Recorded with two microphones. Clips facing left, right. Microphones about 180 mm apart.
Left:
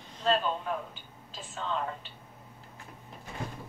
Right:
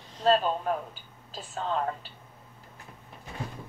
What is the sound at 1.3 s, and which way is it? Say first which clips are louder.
Speech: right 4 dB; 40° right (ahead or behind).